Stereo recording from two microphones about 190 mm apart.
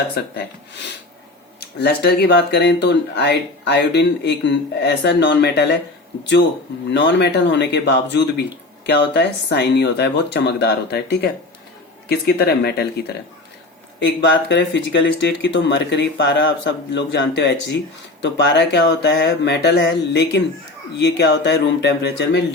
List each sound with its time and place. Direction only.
1.8 s speech: 60° left (ahead or behind)
6.9 s speech: 65° left (ahead or behind)
14.2 s speech: 70° left (ahead or behind)